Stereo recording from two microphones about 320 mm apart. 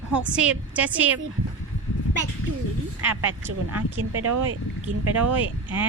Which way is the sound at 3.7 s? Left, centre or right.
Right.